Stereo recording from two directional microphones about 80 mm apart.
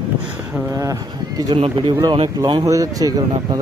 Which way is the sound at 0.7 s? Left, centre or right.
Right.